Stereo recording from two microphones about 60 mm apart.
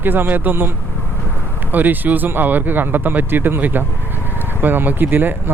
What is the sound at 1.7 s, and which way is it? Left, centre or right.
Speech, right.